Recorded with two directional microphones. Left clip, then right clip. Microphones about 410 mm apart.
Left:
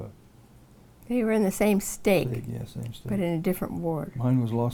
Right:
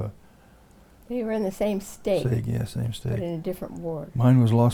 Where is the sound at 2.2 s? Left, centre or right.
Right.